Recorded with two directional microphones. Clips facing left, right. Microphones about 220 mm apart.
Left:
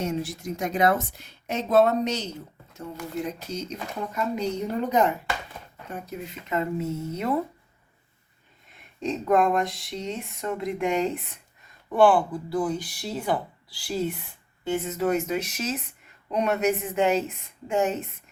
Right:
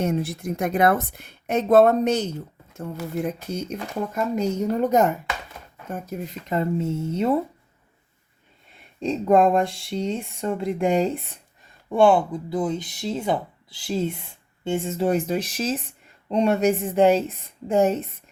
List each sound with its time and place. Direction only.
0.0 s a woman's voice: 55° right (ahead or behind); by 7.3 s 25° right (ahead or behind)
9.2 s a woman's voice: 30° right (ahead or behind)